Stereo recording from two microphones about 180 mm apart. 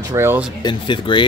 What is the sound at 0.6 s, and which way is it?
Speech, 25° left (ahead or behind).